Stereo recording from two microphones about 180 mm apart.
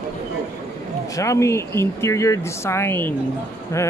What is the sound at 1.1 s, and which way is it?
Speech, 15° left (ahead or behind).